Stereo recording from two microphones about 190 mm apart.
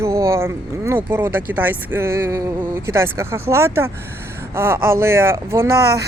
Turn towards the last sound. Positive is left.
turn(degrees=-15)  # may be behind; listen again after turning